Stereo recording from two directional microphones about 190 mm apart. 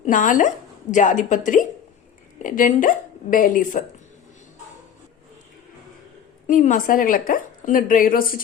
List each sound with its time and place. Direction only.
0.0 s a woman's voice: 40° left (ahead or behind)
6.5 s a woman's voice: 45° left (ahead or behind)